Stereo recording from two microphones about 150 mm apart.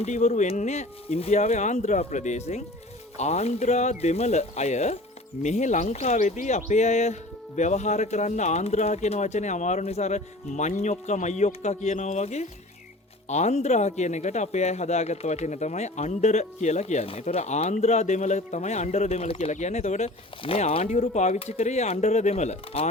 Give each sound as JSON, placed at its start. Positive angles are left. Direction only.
{"t": 0.0, "sound": "speech", "side_deg": 50}